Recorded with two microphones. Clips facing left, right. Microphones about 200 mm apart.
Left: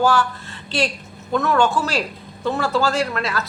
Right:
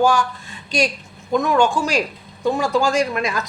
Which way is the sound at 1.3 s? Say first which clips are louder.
Right 1 dB; 15° right (ahead or behind).